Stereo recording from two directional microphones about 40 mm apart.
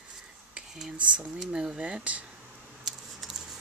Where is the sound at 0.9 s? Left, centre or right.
Right.